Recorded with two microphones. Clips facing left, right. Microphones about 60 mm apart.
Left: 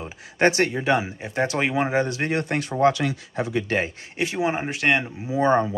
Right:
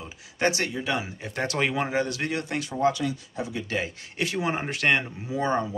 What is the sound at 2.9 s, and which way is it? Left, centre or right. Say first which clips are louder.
Speech: left 4 dB; left.